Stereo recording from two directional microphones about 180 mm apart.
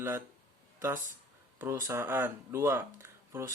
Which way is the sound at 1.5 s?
15° right (ahead or behind).